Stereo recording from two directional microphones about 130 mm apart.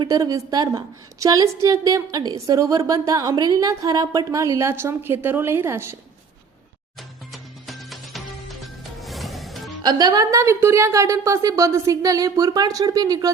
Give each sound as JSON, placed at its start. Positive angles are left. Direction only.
{"t": 0.0, "sound": "a woman's voice", "side_deg": -30}
{"t": 7.7, "sound": "music", "side_deg": 0}
{"t": 9.8, "sound": "a woman's voice", "side_deg": -30}